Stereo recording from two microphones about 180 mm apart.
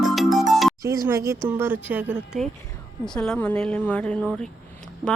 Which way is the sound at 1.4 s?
10° right (ahead or behind).